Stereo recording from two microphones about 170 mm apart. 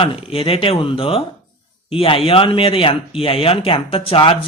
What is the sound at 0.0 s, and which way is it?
Speech, 35° left (ahead or behind).